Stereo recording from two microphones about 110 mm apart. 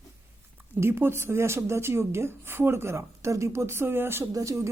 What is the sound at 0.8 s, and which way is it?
Speech, 20° right (ahead or behind).